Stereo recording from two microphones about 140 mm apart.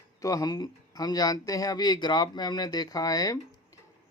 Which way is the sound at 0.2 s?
25° left (ahead or behind).